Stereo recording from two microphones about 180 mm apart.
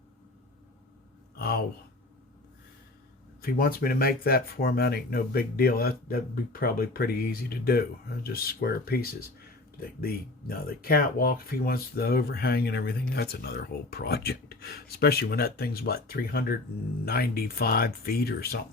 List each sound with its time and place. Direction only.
1.4 s speech: 60° left (ahead or behind)
3.4 s speech: 55° left (ahead or behind)